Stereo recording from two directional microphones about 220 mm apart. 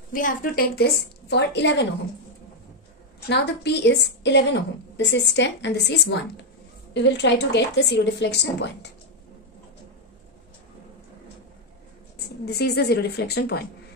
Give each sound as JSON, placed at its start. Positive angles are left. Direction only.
{"t": 0.1, "sound": "a woman's voice", "side_deg": 40}
{"t": 3.3, "sound": "a woman's voice", "side_deg": 50}
{"t": 12.4, "sound": "a woman's voice", "side_deg": 45}